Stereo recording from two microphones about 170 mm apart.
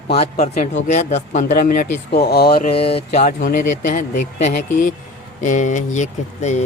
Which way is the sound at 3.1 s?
50° left (ahead or behind).